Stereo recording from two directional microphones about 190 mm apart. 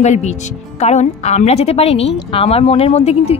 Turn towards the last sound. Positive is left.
turn(degrees=35)  # may be behind; listen again after turning